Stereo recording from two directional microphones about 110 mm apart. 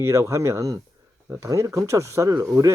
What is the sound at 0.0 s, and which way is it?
Speech, 25° right (ahead or behind).